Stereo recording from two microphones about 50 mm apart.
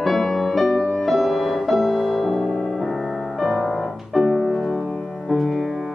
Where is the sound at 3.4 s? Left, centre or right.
Centre.